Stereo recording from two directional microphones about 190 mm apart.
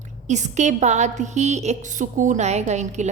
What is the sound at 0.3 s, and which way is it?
A woman's voice, 40° right (ahead or behind).